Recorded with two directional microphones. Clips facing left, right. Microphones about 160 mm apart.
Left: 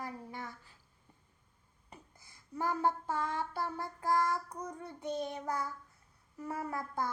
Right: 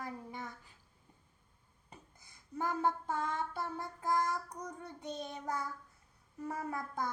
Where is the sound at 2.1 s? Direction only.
20° right (ahead or behind).